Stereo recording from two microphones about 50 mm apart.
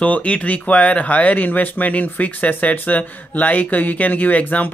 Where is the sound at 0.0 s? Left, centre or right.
Left.